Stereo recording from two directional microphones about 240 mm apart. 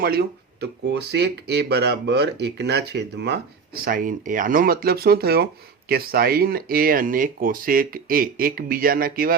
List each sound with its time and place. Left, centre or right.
0.0 s speech: right
3.8 s speech: right